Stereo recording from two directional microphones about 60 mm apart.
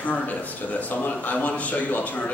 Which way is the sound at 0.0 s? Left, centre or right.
Left.